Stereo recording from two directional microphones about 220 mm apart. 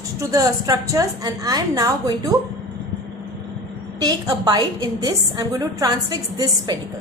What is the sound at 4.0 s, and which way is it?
A woman's voice, 15° right (ahead or behind).